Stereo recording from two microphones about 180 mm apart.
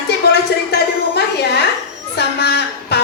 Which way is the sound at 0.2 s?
65° left (ahead or behind).